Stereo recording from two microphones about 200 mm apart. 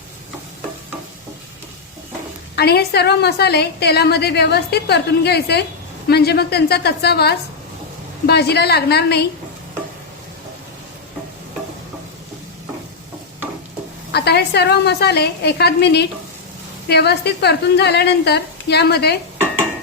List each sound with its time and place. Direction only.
2.6 s a woman's voice: 55° left (ahead or behind)
14.1 s a woman's voice: 55° left (ahead or behind)